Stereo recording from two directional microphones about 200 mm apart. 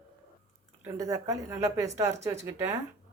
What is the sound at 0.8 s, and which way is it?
Speech, 15° right (ahead or behind).